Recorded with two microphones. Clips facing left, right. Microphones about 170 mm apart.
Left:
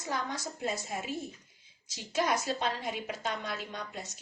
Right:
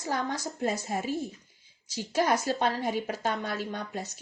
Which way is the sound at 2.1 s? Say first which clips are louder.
Right 4 dB; 40° right (ahead or behind).